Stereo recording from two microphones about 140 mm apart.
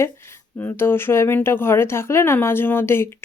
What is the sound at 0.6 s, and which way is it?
Speech, 15° left (ahead or behind).